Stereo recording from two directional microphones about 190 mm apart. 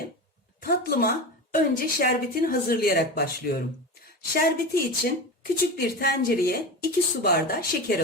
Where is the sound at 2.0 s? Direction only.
50° left (ahead or behind).